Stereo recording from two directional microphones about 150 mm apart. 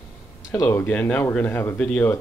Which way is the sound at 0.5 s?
20° left (ahead or behind).